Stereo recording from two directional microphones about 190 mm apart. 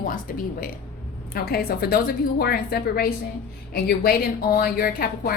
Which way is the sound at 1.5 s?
55° left (ahead or behind).